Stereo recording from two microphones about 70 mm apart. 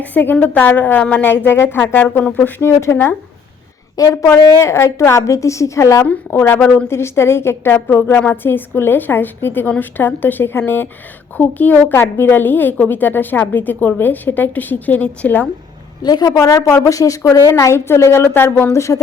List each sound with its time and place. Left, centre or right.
0.0 s a woman's voice: left
6.6 s a woman's voice: left
6.8 s a woman's voice: left
16.0 s a woman's voice: left
16.5 s a woman's voice: left
17.5 s a woman's voice: left